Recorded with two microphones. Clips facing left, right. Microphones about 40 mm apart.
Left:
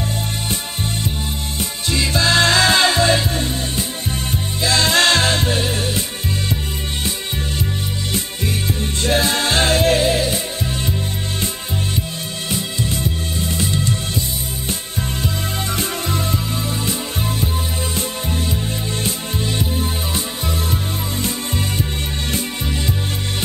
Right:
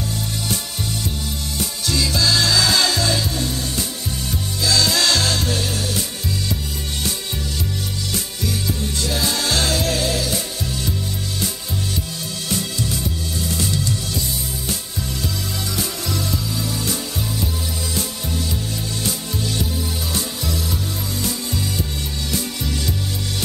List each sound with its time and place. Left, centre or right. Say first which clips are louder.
1.6 s music: left 1 dB; left
8.1 s music: left 2 dB; left
12.4 s music: left 1 dB; left
15.7 s music: left 4 dB; left
17.9 s music: left 2 dB; left